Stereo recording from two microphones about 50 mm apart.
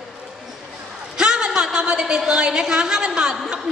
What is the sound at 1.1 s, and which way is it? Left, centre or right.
A woman's voice, centre.